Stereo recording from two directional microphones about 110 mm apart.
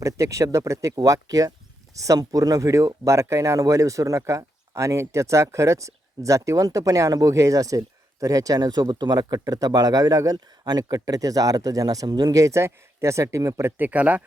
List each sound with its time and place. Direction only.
0.0 s speech: 30° right (ahead or behind)